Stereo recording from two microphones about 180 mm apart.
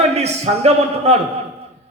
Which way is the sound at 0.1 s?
35° right (ahead or behind).